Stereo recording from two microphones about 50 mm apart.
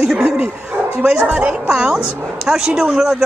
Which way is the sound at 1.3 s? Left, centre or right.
Right.